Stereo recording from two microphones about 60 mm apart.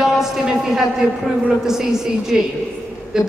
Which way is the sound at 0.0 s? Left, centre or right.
Centre.